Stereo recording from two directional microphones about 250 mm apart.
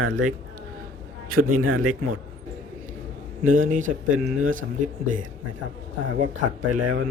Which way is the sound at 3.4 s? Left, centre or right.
Right.